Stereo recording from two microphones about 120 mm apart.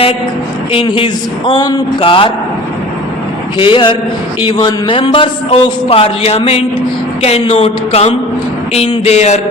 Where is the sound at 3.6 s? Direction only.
45° left (ahead or behind).